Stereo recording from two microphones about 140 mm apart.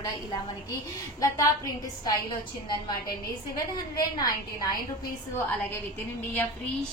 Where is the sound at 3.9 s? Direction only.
25° left (ahead or behind).